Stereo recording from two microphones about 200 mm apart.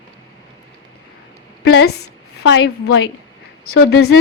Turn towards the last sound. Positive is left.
turn(degrees=60)  # may be behind; listen again after turning